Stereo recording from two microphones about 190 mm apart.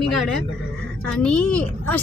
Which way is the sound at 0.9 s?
5° left (ahead or behind).